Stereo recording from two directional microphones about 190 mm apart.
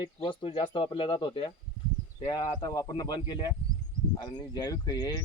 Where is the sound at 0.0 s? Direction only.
25° left (ahead or behind).